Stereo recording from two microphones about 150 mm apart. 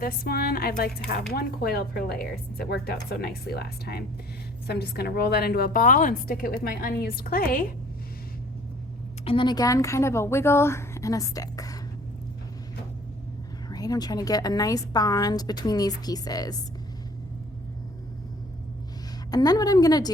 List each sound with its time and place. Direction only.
0.0 s a woman's voice: 85° left; by 7.7 s 70° left (ahead or behind)
9.2 s a woman's voice: 35° left (ahead or behind)
13.7 s a woman's voice: 25° left (ahead or behind)
19.3 s a woman's voice: 25° left (ahead or behind)